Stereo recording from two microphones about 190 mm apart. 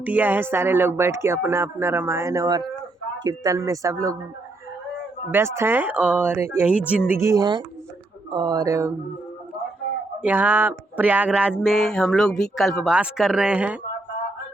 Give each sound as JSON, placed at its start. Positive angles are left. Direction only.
{"t": 0.0, "sound": "speech", "side_deg": -10}
{"t": 5.3, "sound": "speech", "side_deg": -15}
{"t": 10.2, "sound": "speech", "side_deg": -10}